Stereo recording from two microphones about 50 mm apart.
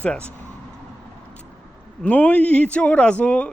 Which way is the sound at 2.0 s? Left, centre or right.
Left.